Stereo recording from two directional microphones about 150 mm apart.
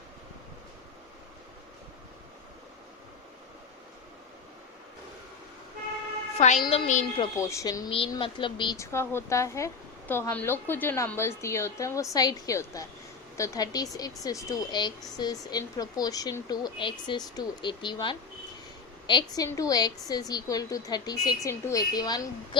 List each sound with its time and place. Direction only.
6.3 s a woman's voice: 50° left (ahead or behind)
7.3 s a woman's voice: 20° left (ahead or behind)
7.9 s speech: 35° left (ahead or behind)
8.8 s a woman's voice: 15° left (ahead or behind)